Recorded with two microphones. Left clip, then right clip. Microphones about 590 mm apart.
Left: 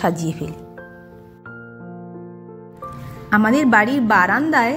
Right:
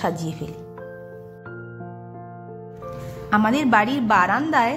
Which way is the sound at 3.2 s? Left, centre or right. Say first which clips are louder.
Left 3 dB; centre.